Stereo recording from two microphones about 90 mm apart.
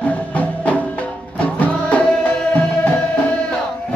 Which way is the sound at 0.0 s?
15° left (ahead or behind).